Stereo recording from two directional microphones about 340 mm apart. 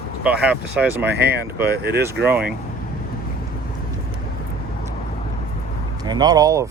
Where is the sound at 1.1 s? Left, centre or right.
Right.